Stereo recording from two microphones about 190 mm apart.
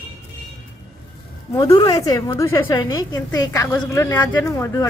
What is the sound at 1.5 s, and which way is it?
A woman's voice, 20° left (ahead or behind).